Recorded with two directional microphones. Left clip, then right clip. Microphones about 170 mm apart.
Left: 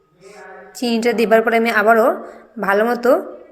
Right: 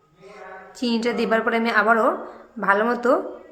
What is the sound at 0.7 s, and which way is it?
A woman's voice, 15° left (ahead or behind).